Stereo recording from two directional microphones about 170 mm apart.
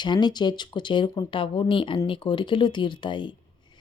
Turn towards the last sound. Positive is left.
turn(degrees=30)  # may be behind; listen again after turning